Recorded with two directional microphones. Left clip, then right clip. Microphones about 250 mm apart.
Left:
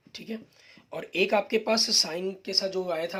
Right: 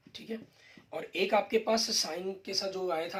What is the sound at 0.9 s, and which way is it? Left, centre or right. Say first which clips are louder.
Speech: left 4 dB; left.